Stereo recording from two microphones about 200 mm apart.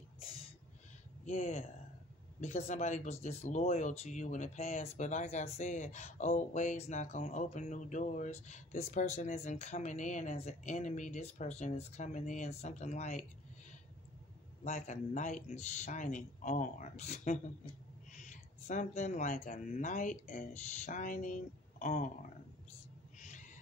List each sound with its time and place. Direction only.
1.2 s speech: 35° left (ahead or behind)
14.6 s speech: 35° left (ahead or behind)
23.1 s owl: 40° left (ahead or behind)